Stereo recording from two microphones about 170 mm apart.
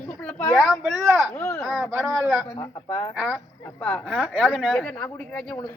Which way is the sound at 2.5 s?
20° left (ahead or behind).